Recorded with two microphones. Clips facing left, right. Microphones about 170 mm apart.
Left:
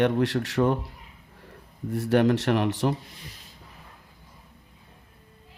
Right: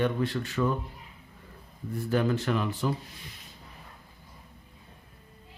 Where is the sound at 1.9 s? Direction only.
75° left (ahead or behind).